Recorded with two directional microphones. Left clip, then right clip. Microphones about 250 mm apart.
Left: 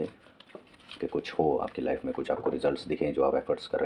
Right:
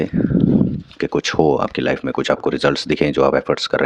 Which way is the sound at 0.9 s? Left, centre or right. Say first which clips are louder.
Right 12 dB; right.